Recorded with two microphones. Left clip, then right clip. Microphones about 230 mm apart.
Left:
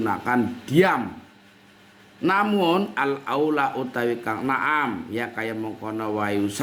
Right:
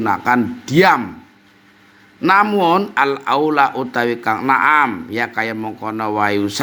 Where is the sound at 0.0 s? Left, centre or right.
Right.